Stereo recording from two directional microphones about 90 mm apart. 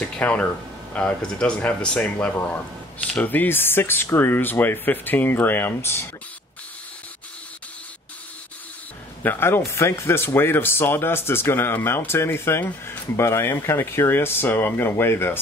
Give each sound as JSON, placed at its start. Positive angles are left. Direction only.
{"t": 0.0, "sound": "speech", "side_deg": 15}
{"t": 9.2, "sound": "speech", "side_deg": 25}